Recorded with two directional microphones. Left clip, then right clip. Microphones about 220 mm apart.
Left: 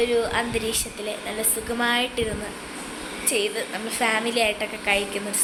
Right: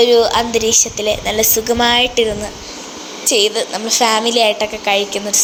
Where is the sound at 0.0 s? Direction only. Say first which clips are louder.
Right 11 dB; 25° right (ahead or behind).